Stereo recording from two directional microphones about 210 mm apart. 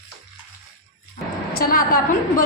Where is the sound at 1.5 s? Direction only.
45° left (ahead or behind).